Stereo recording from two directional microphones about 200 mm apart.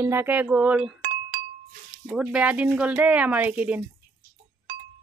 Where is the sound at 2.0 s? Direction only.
5° right (ahead or behind).